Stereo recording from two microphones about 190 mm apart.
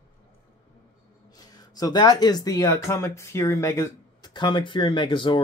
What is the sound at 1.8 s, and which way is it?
Speech, 20° left (ahead or behind).